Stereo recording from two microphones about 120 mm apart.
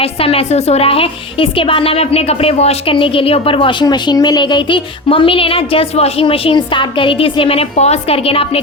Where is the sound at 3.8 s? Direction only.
35° left (ahead or behind); by 8.6 s 55° left (ahead or behind).